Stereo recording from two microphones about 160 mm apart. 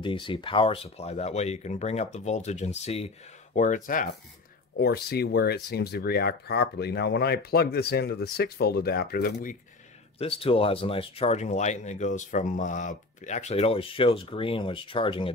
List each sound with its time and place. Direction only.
0.0 s speech: 30° left (ahead or behind)
3.5 s speech: 55° left (ahead or behind)
4.7 s speech: 75° left (ahead or behind)
10.1 s speech: 35° left (ahead or behind)